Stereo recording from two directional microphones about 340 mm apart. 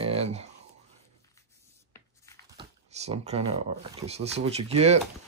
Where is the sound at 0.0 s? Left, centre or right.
Centre.